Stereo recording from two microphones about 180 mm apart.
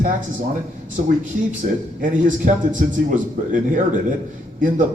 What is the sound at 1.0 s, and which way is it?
Speech, 50° right (ahead or behind).